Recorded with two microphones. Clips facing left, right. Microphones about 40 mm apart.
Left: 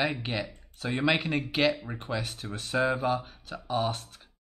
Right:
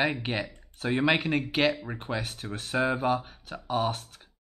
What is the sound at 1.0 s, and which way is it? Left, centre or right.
Speech, centre.